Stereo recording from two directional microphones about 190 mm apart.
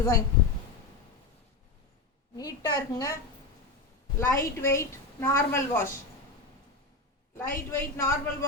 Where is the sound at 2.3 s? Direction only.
20° left (ahead or behind).